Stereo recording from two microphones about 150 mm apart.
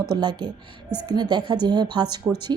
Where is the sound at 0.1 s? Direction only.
30° right (ahead or behind).